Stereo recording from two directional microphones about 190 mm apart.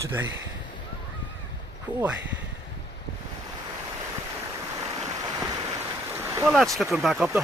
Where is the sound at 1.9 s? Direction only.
20° right (ahead or behind).